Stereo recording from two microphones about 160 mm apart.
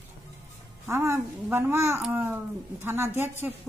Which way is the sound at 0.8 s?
15° right (ahead or behind).